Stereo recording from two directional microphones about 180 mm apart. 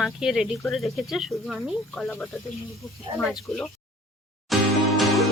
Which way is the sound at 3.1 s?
30° right (ahead or behind).